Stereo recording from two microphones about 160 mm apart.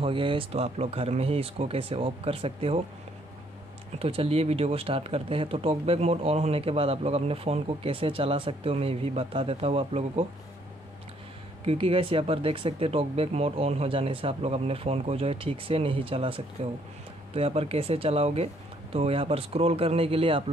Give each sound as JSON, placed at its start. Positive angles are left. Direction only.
{"t": 0.0, "sound": "speech", "side_deg": -35}
{"t": 4.0, "sound": "speech", "side_deg": -35}
{"t": 11.6, "sound": "speech", "side_deg": -35}